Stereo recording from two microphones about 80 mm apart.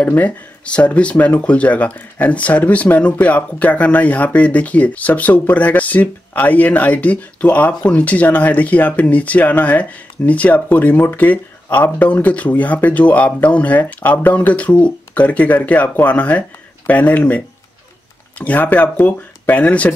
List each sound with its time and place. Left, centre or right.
0.0 s speech: centre
18.4 s speech: centre